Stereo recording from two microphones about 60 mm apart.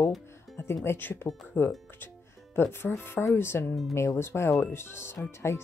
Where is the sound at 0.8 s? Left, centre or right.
Left.